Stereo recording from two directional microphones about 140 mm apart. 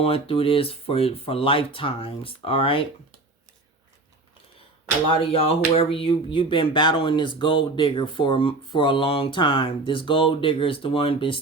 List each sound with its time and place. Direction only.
0.0 s speech: 40° left (ahead or behind)
5.1 s speech: 45° left (ahead or behind)